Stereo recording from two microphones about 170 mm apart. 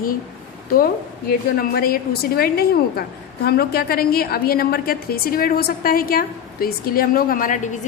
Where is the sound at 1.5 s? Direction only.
60° left (ahead or behind).